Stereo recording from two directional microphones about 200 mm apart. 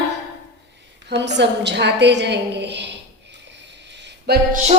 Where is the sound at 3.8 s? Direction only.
60° right (ahead or behind).